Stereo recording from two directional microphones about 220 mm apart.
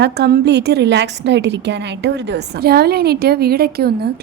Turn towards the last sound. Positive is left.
turn(degrees=-45)  # may be behind; listen again after turning